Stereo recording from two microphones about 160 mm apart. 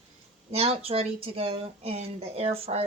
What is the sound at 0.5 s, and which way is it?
Speech, 40° right (ahead or behind).